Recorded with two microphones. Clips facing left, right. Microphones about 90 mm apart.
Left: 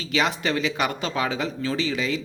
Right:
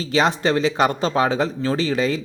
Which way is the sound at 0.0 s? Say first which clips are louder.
Right 5 dB; 35° right (ahead or behind).